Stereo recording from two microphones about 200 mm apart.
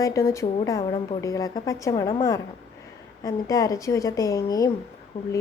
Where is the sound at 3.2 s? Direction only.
15° left (ahead or behind).